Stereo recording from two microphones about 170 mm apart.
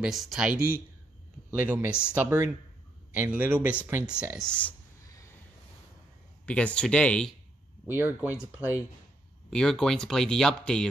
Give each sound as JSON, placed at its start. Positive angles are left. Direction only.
{"t": 0.0, "sound": "speech", "side_deg": 0}
{"t": 4.6, "sound": "a sound", "side_deg": 20}
{"t": 6.4, "sound": "speech", "side_deg": 5}
{"t": 7.8, "sound": "speech", "side_deg": -10}
{"t": 9.5, "sound": "speech", "side_deg": 5}